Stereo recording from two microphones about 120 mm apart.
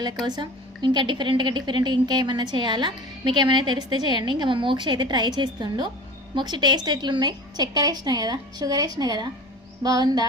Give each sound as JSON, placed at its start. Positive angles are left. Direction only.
{"t": 0.3, "sound": "a woman's voice", "side_deg": -35}